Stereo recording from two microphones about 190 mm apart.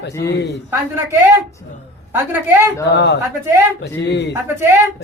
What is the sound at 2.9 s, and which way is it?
Speech, 60° left (ahead or behind).